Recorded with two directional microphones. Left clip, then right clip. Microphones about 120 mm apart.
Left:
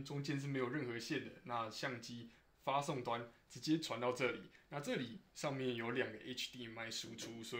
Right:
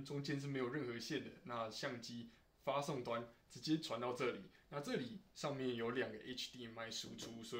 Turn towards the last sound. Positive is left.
turn(degrees=30)  # may be behind; listen again after turning